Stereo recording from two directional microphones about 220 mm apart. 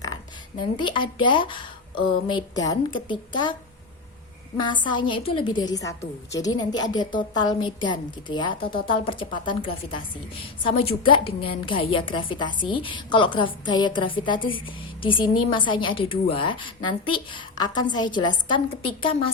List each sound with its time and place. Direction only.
0.8 s a woman's voice: 20° left (ahead or behind)
4.5 s a woman's voice: 20° left (ahead or behind)